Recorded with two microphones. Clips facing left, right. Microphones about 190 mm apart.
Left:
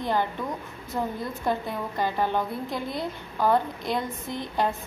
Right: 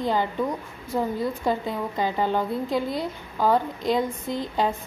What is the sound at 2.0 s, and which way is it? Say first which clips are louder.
A woman's voice: right 1 dB; 15° right (ahead or behind).